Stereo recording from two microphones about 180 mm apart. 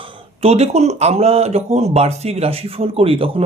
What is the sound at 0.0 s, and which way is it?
Speech, 30° right (ahead or behind).